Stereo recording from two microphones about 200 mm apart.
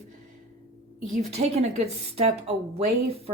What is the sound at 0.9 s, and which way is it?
Speech, 35° right (ahead or behind).